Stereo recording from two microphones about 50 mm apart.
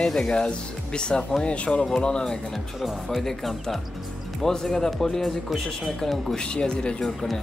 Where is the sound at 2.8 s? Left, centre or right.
Centre.